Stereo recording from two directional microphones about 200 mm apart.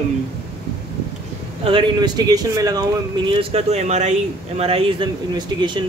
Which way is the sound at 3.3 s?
30° right (ahead or behind).